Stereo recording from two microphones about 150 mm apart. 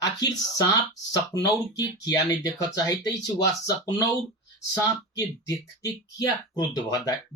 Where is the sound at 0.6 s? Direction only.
25° left (ahead or behind).